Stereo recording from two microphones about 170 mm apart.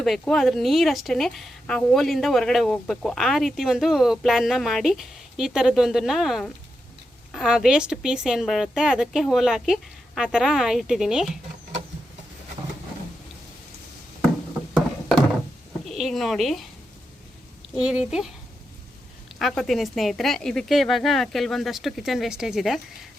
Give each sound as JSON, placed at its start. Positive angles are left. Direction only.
{"t": 0.0, "sound": "a woman's voice", "side_deg": 0}
{"t": 14.7, "sound": "a sound", "side_deg": 0}
{"t": 15.8, "sound": "speech", "side_deg": 0}
{"t": 17.7, "sound": "a woman's voice", "side_deg": -5}
{"t": 19.4, "sound": "a woman's voice", "side_deg": 0}